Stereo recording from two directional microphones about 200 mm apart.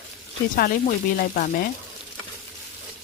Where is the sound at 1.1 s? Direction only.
45° left (ahead or behind).